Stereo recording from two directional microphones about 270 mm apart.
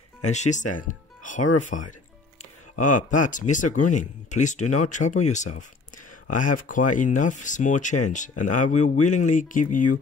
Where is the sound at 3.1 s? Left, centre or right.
Left.